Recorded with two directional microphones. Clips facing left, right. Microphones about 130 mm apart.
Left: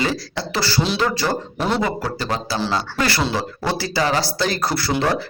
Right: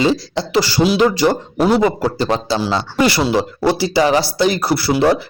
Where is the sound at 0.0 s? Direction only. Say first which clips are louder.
Right 7 dB; 20° right (ahead or behind).